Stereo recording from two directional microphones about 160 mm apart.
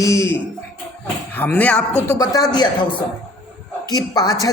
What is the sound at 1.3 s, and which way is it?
Speech, 10° left (ahead or behind).